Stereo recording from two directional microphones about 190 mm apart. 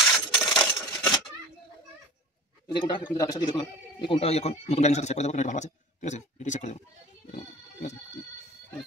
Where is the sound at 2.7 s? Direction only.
25° left (ahead or behind).